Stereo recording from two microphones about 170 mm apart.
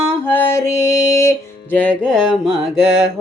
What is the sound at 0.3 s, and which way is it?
Music, 15° left (ahead or behind).